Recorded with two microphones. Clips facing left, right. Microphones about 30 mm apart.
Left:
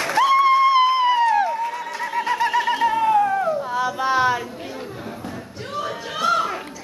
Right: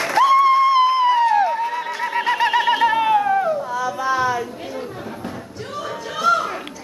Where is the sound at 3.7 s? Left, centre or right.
Left.